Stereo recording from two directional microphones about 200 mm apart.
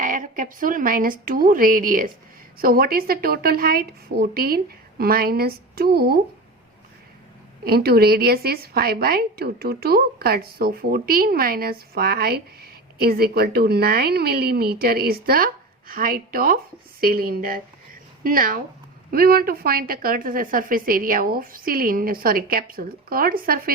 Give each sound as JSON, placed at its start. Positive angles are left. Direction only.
{"t": 0.0, "sound": "a woman's voice", "side_deg": -40}
{"t": 7.6, "sound": "a woman's voice", "side_deg": -50}